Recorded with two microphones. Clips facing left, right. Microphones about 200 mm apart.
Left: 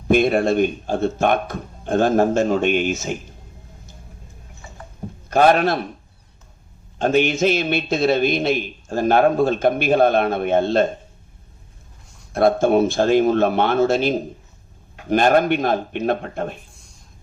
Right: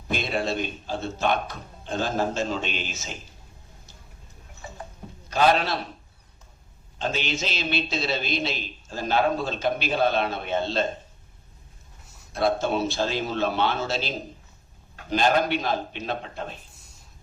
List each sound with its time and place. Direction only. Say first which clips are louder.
0.1 s a man's voice: left 11 dB; 55° left (ahead or behind)
5.3 s a man's voice: left 6 dB; 50° left (ahead or behind)
7.0 s a man's voice: left 12 dB; 55° left (ahead or behind)
12.0 s a sound: left 3 dB; 5° right (ahead or behind)
12.3 s a man's voice: left 8 dB; 50° left (ahead or behind)